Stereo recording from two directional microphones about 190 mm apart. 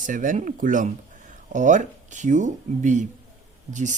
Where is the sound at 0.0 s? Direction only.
45° right (ahead or behind).